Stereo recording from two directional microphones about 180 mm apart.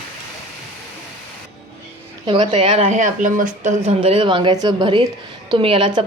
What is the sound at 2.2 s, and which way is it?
A woman's voice, 30° right (ahead or behind).